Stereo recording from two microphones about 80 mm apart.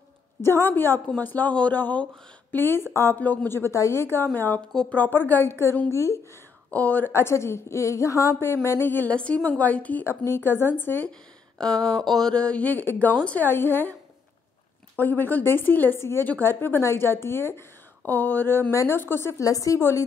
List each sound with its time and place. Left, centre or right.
0.4 s a woman's voice: left
4.3 s a woman's voice: left
6.7 s a woman's voice: centre
7.1 s a woman's voice: left
9.1 s speech: centre
10.0 s a woman's voice: left
11.5 s a woman's voice: centre; by 13.9 s left
15.0 s a woman's voice: left
19.4 s a woman's voice: left
19.8 s a woman's voice: left